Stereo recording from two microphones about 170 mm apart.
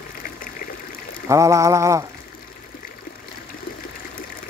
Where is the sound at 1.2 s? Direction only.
20° right (ahead or behind).